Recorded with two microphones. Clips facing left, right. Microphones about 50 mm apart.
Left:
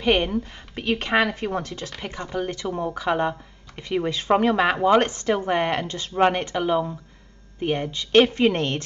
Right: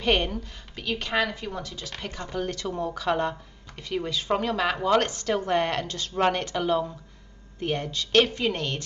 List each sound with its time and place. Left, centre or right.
0.0 s a woman's voice: centre
0.3 s speech: left
2.0 s speech: left
8.5 s speech: left